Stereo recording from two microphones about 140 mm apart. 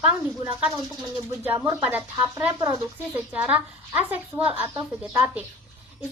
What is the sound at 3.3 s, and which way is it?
A woman's voice, 10° right (ahead or behind).